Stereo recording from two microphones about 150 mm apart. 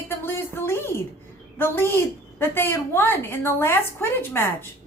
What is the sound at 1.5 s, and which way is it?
A woman's voice, 15° left (ahead or behind).